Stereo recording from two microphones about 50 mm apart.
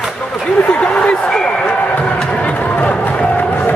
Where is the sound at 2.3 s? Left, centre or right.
Left.